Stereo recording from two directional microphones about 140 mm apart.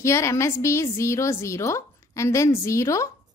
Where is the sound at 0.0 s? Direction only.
20° left (ahead or behind).